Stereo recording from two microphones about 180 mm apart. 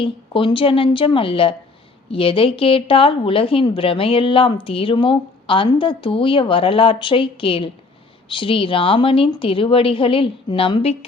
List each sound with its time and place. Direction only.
0.0 s speech: 30° left (ahead or behind)